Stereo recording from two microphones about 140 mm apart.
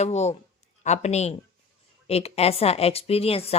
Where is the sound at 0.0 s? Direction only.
50° left (ahead or behind).